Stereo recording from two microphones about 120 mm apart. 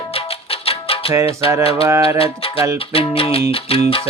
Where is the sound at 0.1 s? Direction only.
55° left (ahead or behind).